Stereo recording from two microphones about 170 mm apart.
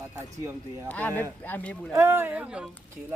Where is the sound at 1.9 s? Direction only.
15° right (ahead or behind).